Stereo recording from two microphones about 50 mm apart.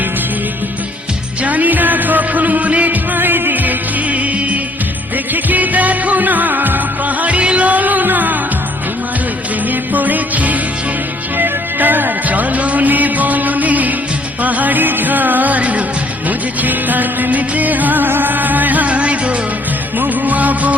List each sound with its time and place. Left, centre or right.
1.4 s music: right
9.6 s music: right
20.0 s music of bollywood: right